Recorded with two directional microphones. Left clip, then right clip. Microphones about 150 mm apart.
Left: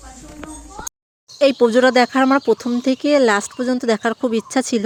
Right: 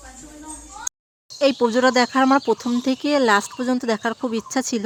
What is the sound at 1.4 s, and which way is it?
Speech, 20° left (ahead or behind).